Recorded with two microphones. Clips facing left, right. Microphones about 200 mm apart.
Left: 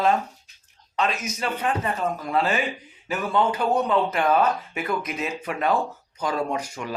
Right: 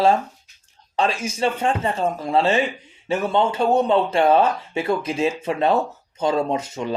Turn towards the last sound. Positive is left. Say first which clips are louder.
# right 4 dB
turn(degrees=-25)  # may be behind; listen again after turning